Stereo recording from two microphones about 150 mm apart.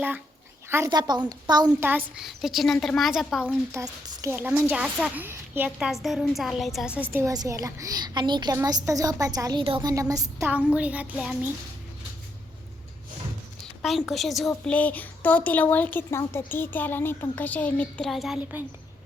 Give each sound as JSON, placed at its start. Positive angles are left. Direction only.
{"t": 0.9, "sound": "a woman's voice", "side_deg": -30}
{"t": 1.7, "sound": "a woman's voice", "side_deg": -10}
{"t": 2.2, "sound": "a woman's voice", "side_deg": 0}
{"t": 3.7, "sound": "a woman's voice", "side_deg": -20}
{"t": 7.1, "sound": "a woman's voice", "side_deg": -20}
{"t": 9.9, "sound": "a woman's voice", "side_deg": -25}
{"t": 10.5, "sound": "a woman's voice", "side_deg": -10}
{"t": 13.8, "sound": "a woman's voice", "side_deg": 0}